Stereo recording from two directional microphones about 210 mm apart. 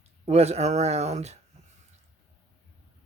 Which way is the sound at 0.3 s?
30° right (ahead or behind).